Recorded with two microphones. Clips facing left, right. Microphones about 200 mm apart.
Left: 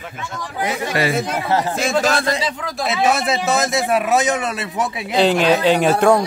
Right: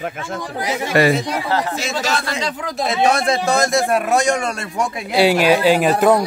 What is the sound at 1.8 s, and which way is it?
Speech, 55° left (ahead or behind).